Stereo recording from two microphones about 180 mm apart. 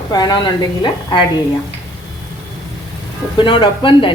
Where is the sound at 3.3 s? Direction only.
25° left (ahead or behind).